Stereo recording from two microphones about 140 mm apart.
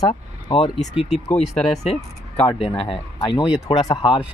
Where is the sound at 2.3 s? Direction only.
35° left (ahead or behind).